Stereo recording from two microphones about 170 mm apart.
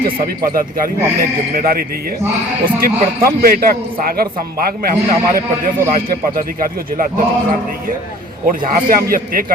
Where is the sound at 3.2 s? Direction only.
60° right (ahead or behind).